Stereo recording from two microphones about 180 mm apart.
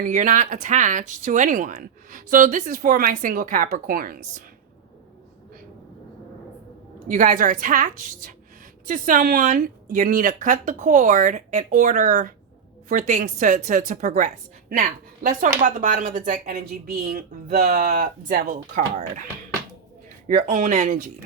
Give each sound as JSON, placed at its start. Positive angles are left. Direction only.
{"t": 0.0, "sound": "speech", "side_deg": -45}
{"t": 7.1, "sound": "a woman's voice", "side_deg": -50}
{"t": 20.2, "sound": "speech", "side_deg": -45}